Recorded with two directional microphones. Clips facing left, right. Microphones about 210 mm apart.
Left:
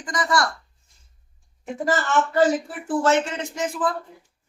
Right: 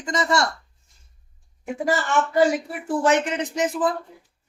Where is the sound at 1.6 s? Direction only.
10° right (ahead or behind).